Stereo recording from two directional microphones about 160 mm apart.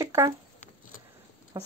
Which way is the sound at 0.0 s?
20° right (ahead or behind).